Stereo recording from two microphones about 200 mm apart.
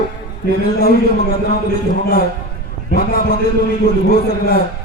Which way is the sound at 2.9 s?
45° left (ahead or behind).